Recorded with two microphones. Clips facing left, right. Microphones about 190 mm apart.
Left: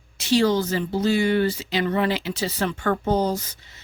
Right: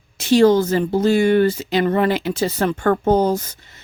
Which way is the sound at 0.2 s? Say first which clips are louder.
Right 7 dB; 50° right (ahead or behind).